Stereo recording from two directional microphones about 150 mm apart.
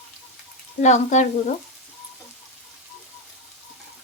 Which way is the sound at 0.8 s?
50° left (ahead or behind).